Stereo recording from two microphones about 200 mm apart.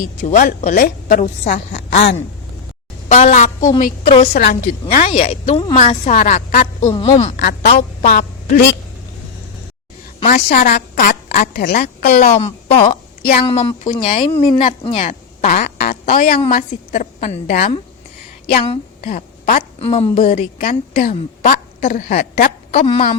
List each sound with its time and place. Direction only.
0.2 s a woman's voice: 40° left (ahead or behind)
3.1 s a woman's voice: 35° left (ahead or behind)
4.1 s speech: 30° left (ahead or behind)
4.4 s a woman's voice: 45° left (ahead or behind)
5.1 s a woman's voice: 30° left (ahead or behind)
7.3 s a woman's voice: 60° left (ahead or behind)
10.2 s a woman's voice: 45° left (ahead or behind)
12.8 s a sound: 45° left (ahead or behind)
13.4 s a woman's voice: 25° left (ahead or behind)
14.9 s fart: 40° left (ahead or behind)
16.5 s a woman's voice: 40° left (ahead or behind)
18.5 s a woman's voice: 30° left (ahead or behind)
22.9 s a woman's voice: 35° left (ahead or behind)